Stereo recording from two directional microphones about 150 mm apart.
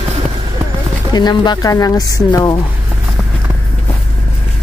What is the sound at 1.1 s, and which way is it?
Speech, 30° left (ahead or behind).